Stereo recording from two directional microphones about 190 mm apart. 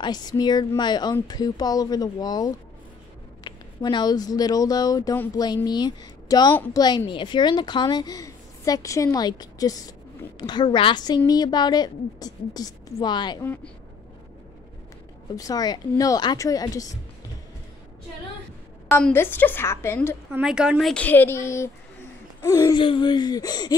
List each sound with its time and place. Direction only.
0.0 s speech: 20° left (ahead or behind)
6.5 s a woman's voice: 10° left (ahead or behind)
6.8 s speech: 20° left (ahead or behind)
15.3 s speech: 20° left (ahead or behind)
18.9 s a woman's voice: 10° left (ahead or behind)
20.2 s speech: 5° right (ahead or behind); by 23.8 s 20° left (ahead or behind)